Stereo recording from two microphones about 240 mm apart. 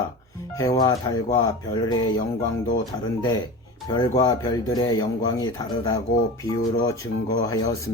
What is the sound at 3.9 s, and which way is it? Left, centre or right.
Speech, centre.